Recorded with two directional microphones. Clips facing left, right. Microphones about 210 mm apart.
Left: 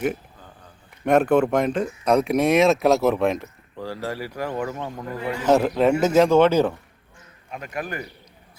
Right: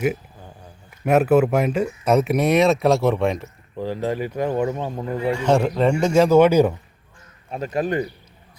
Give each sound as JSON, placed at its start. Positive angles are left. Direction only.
{"t": 0.0, "sound": "a sound", "side_deg": -5}
{"t": 1.0, "sound": "speech", "side_deg": -5}
{"t": 3.8, "sound": "speech", "side_deg": -20}
{"t": 5.3, "sound": "speech", "side_deg": 5}
{"t": 7.5, "sound": "speech", "side_deg": -30}